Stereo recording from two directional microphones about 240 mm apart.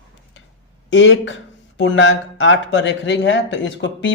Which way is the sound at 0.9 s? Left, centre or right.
Left.